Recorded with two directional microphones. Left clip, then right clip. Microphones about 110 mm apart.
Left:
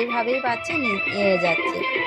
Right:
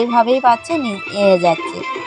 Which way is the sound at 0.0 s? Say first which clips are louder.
Right 10 dB; 55° right (ahead or behind).